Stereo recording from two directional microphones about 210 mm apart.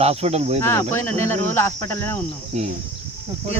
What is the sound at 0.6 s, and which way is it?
Speech, 15° left (ahead or behind).